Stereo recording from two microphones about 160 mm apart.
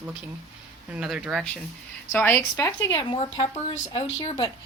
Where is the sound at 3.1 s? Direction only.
30° left (ahead or behind).